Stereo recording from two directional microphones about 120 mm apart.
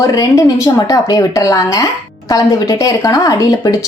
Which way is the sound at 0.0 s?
30° left (ahead or behind).